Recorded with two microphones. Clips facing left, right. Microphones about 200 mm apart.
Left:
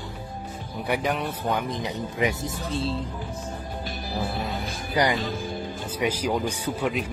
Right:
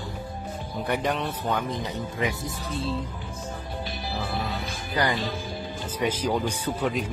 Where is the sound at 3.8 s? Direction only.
45° left (ahead or behind).